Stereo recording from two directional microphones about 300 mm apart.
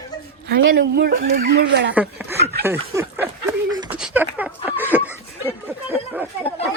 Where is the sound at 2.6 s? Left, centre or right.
Centre.